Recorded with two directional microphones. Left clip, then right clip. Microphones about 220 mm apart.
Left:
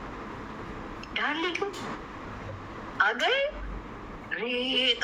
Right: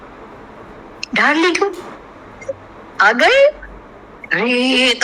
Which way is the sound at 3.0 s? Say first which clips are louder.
Right 15 dB; 55° right (ahead or behind).